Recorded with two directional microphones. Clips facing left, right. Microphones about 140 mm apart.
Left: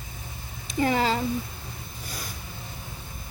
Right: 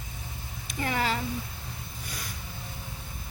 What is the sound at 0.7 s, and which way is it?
Speech, 25° left (ahead or behind).